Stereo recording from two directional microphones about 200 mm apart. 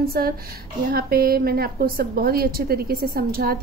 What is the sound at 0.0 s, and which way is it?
A woman's voice, 50° right (ahead or behind).